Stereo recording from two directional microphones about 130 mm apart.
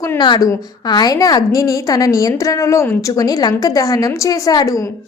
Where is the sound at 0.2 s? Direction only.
30° left (ahead or behind).